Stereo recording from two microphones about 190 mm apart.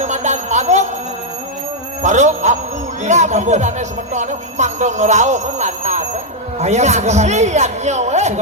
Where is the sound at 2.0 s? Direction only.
40° right (ahead or behind).